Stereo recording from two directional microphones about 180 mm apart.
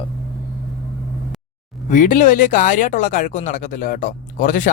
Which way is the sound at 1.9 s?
45° left (ahead or behind).